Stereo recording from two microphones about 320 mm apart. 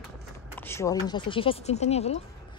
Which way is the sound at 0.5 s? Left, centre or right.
Centre.